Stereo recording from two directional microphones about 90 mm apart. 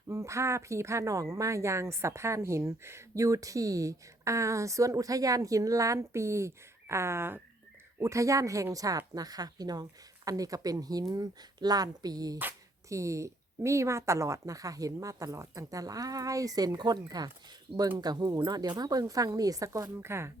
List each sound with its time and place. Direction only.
0.1 s speech: 30° right (ahead or behind)
12.9 s speech: 35° right (ahead or behind)